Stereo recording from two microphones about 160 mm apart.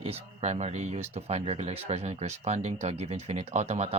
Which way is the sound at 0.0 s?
40° right (ahead or behind).